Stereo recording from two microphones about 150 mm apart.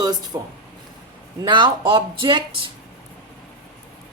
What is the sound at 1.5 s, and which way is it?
Speech, 30° right (ahead or behind).